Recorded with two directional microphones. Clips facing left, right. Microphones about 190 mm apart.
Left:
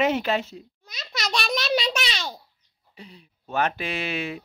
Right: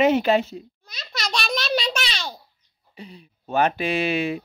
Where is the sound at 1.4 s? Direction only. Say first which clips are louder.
Even; centre (ahead or behind).